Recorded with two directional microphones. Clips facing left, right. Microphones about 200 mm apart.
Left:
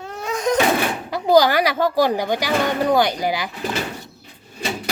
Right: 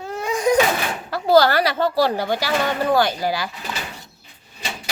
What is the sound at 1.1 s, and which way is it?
A woman's voice, 15° left (ahead or behind).